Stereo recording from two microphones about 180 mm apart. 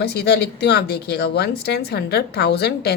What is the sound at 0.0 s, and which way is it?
Speech, 65° left (ahead or behind).